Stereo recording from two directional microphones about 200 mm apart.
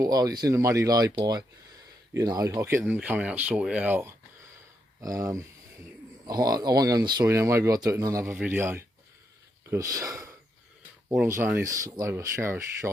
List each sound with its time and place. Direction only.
0.0 s speech: 20° right (ahead or behind)